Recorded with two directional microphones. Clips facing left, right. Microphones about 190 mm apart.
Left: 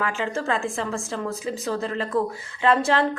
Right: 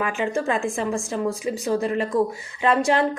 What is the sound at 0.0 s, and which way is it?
A woman's voice, 15° right (ahead or behind).